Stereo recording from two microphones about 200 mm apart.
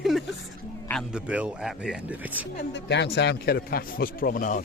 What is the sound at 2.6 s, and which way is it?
A man's voice, 60° left (ahead or behind).